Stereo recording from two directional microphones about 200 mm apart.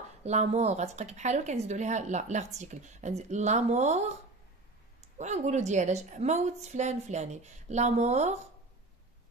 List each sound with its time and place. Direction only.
0.2 s a woman's voice: 35° right (ahead or behind)